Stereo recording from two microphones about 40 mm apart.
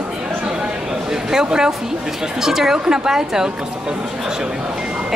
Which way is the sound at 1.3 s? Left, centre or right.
Centre.